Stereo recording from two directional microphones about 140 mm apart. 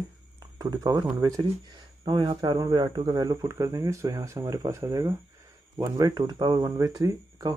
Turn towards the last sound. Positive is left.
turn(degrees=-25)  # may be behind; listen again after turning